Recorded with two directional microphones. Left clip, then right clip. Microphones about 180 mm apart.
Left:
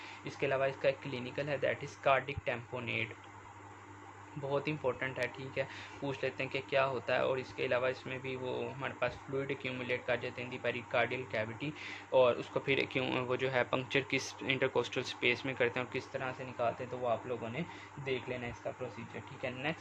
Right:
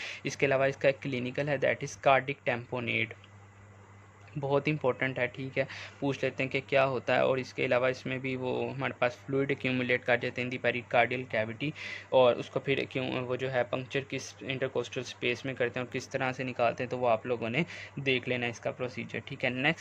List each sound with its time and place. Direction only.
0.0 s speech: 35° right (ahead or behind)
4.4 s speech: 30° right (ahead or behind)